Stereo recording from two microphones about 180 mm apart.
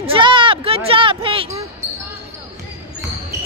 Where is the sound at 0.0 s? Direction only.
30° right (ahead or behind).